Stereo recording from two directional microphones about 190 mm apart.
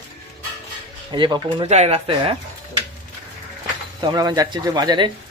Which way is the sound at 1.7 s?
35° right (ahead or behind).